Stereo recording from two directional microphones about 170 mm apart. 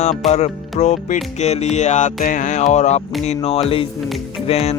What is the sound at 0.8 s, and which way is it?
Music, 40° left (ahead or behind).